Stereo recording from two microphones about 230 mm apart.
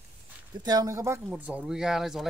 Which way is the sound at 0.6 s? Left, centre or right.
Centre.